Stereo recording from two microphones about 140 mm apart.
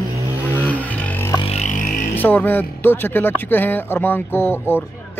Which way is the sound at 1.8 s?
70° left (ahead or behind).